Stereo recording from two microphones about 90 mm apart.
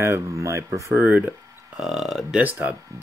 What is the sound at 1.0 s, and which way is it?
Speech, 20° right (ahead or behind).